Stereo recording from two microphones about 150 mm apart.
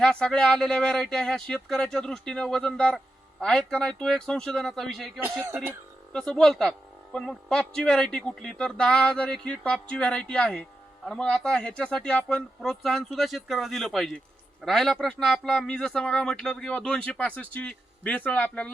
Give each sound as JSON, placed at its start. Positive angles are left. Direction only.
{"t": 0.0, "sound": "speech", "side_deg": 5}
{"t": 5.2, "sound": "speech", "side_deg": -15}
{"t": 6.1, "sound": "speech", "side_deg": 5}